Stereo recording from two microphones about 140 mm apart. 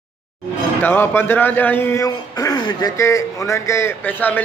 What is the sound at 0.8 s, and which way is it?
Speech, 15° left (ahead or behind).